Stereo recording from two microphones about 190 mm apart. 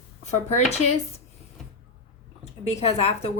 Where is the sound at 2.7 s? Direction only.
35° left (ahead or behind).